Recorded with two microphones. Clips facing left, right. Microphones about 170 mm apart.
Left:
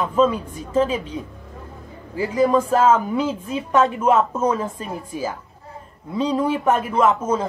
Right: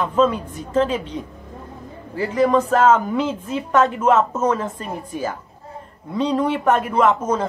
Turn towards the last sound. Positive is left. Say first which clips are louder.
# right 1 dB
turn(degrees=10)  # may be behind; listen again after turning